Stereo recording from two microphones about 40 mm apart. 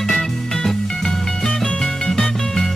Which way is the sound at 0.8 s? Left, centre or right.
Centre.